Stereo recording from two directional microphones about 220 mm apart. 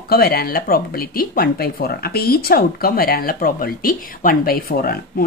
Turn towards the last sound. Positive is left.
turn(degrees=40)  # may be behind; listen again after turning